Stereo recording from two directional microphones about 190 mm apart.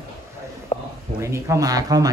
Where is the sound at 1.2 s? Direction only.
15° right (ahead or behind).